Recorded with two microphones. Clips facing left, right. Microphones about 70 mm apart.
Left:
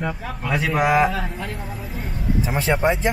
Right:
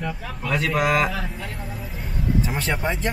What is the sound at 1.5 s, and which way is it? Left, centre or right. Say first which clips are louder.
Vehicle: left 2 dB; centre.